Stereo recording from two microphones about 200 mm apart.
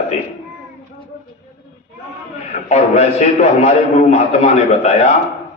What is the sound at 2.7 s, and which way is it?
A man's voice, 35° left (ahead or behind).